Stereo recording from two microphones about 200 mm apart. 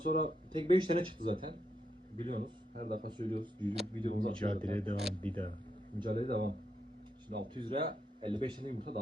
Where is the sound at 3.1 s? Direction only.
25° right (ahead or behind).